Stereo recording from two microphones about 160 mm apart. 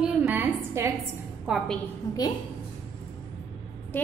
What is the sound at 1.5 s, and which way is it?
Speech, 5° right (ahead or behind).